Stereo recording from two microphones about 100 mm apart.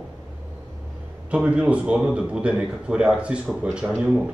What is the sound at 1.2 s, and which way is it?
Speech, 10° right (ahead or behind).